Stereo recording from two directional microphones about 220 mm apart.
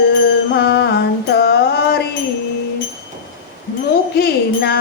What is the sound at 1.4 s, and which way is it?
Music, 50° left (ahead or behind).